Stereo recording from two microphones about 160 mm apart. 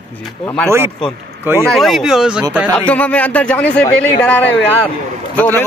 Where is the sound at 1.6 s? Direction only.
Centre (ahead or behind).